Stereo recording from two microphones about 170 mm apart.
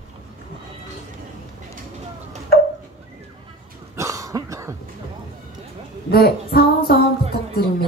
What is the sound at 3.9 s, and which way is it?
Cough, 20° right (ahead or behind).